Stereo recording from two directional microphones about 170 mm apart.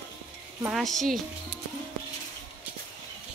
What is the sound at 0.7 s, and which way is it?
Speech, centre (ahead or behind).